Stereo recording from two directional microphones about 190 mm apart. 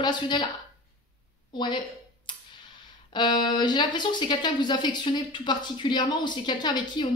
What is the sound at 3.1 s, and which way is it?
A woman's voice, 25° left (ahead or behind).